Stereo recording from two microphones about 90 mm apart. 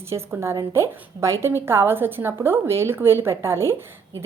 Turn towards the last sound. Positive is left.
turn(degrees=-30)  # may be behind; listen again after turning